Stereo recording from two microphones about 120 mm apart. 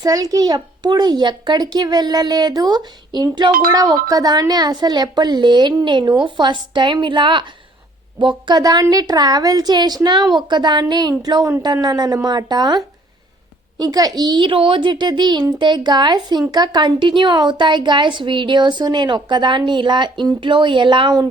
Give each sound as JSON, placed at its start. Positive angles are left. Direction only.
{"t": 0.0, "sound": "a child's voice", "side_deg": -30}